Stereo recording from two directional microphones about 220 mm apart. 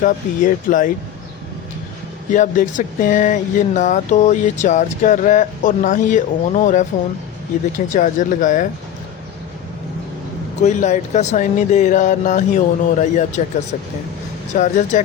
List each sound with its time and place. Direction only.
0.0 s speech: 35° left (ahead or behind)
2.3 s speech: 35° left (ahead or behind)
7.9 s speech: 35° left (ahead or behind)
10.6 s speech: 30° left (ahead or behind)
14.6 s speech: 35° left (ahead or behind)